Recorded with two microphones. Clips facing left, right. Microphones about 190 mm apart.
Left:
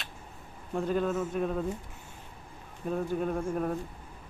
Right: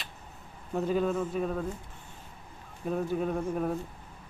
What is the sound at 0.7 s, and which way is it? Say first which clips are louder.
Speech: right 1 dB; 5° right (ahead or behind).